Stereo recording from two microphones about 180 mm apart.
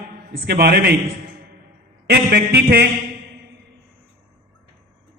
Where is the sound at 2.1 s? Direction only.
65° right (ahead or behind).